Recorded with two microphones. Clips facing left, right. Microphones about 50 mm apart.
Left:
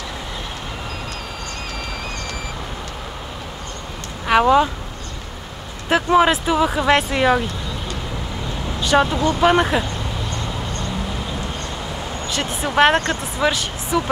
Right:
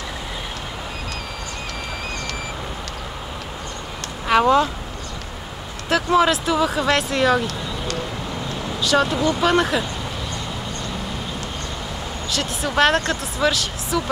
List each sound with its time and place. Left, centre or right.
4.3 s speech: centre
5.9 s speech: left
8.9 s speech: left
12.3 s speech: left